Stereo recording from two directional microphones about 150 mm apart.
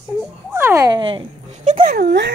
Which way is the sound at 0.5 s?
15° right (ahead or behind).